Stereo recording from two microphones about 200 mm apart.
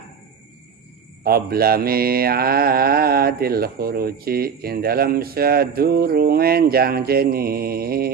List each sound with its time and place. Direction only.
1.2 s mantra: 50° right (ahead or behind)